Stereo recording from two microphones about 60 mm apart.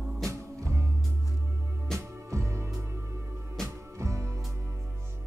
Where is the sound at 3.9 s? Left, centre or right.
Right.